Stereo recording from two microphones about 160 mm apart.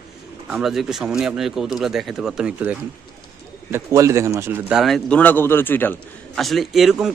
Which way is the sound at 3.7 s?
20° right (ahead or behind).